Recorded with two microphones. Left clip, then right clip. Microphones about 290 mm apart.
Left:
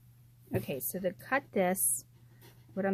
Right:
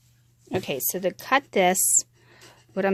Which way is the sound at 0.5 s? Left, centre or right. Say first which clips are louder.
Right 9 dB; right.